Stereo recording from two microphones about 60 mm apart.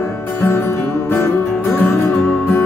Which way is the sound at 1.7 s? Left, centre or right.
Left.